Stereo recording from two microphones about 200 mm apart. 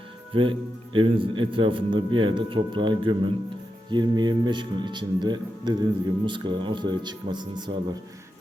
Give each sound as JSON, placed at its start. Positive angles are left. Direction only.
{"t": 0.9, "sound": "speech", "side_deg": -25}